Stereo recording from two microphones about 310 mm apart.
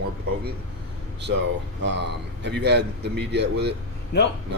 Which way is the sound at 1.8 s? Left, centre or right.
Right.